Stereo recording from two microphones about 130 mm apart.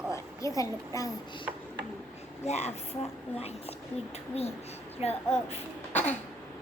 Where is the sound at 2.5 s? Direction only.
55° left (ahead or behind).